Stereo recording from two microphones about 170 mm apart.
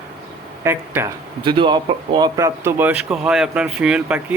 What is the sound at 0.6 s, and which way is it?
Speech, 15° right (ahead or behind).